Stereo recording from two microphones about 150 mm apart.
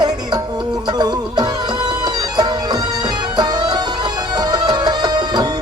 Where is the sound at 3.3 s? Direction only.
25° right (ahead or behind).